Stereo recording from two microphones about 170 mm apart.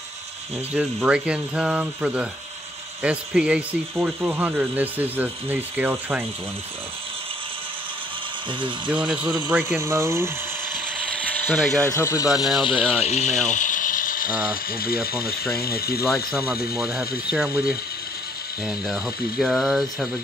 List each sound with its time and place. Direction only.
0.7 s speech: 5° right (ahead or behind)
8.5 s speech: 30° right (ahead or behind)
8.9 s speech: 10° right (ahead or behind)
11.1 s ratchet: 10° left (ahead or behind)
11.9 s speech: 20° left (ahead or behind)
12.6 s speech: 35° left (ahead or behind)
13.5 s ratchet: 50° left (ahead or behind)
15.5 s speech: 65° left (ahead or behind)
16.7 s speech: 5° right (ahead or behind)